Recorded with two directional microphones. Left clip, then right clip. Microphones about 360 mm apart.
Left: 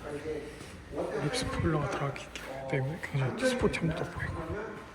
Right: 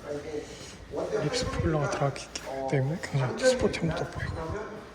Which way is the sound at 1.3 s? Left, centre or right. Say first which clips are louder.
Right 3 dB; centre.